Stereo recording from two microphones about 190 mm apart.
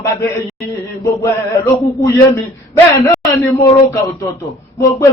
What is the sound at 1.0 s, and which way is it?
Male singing, 15° left (ahead or behind).